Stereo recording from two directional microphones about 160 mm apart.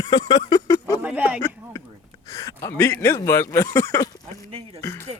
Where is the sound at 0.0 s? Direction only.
25° left (ahead or behind).